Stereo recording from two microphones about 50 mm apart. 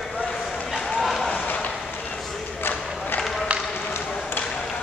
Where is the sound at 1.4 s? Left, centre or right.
Left.